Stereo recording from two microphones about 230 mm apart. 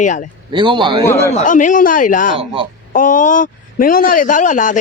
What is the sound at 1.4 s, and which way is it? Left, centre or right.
Speech, left.